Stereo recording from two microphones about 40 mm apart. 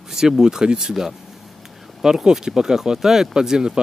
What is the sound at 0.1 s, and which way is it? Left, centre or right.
Speech, centre.